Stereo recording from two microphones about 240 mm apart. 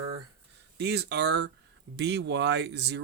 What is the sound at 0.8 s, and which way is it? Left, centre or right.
Speech, right.